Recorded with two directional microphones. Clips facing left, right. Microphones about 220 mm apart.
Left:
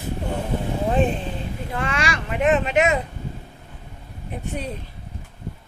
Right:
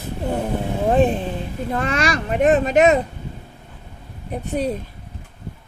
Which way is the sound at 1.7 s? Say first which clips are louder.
Right 5 dB; 40° right (ahead or behind).